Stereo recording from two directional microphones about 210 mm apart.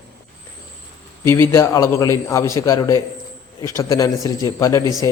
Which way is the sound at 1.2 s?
10° left (ahead or behind).